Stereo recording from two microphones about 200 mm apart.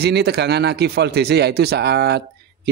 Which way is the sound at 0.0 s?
55° right (ahead or behind).